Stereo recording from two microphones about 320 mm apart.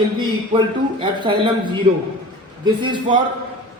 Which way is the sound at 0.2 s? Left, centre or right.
Centre.